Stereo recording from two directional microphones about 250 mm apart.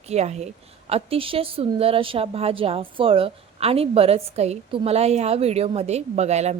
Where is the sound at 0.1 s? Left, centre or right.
Right.